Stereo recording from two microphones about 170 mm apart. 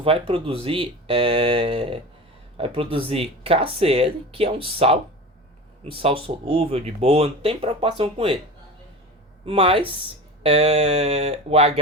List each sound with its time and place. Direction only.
0.0 s speech: 35° right (ahead or behind)
9.5 s speech: 35° right (ahead or behind)